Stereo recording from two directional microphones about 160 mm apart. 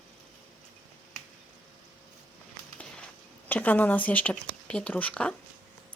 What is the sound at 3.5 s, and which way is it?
Speech, 10° left (ahead or behind).